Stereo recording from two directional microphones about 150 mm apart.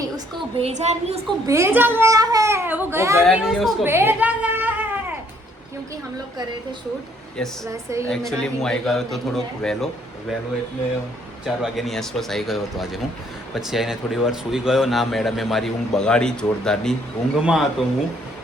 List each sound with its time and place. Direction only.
0.6 s a woman's voice: 50° right (ahead or behind)
1.5 s speech: 20° right (ahead or behind)
3.2 s speech: centre (ahead or behind)
3.8 s a sound: 15° right (ahead or behind)
7.3 s speech: 5° left (ahead or behind)
7.7 s a woman's voice: 20° right (ahead or behind)
8.0 s speech: 5° left (ahead or behind)
11.4 s speech: centre (ahead or behind)